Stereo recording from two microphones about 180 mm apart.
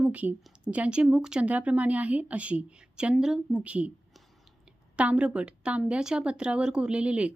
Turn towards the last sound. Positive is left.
turn(degrees=-5)  # may be behind; listen again after turning